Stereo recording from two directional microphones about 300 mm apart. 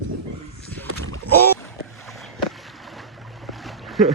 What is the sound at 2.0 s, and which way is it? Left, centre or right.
Boat, centre.